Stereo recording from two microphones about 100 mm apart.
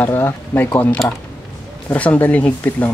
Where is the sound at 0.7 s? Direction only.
15° left (ahead or behind).